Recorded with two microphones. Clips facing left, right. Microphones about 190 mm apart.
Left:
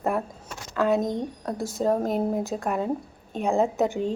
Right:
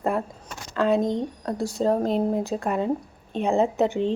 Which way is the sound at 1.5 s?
Centre (ahead or behind).